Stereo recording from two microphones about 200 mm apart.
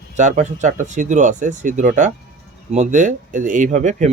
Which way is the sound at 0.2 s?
35° right (ahead or behind).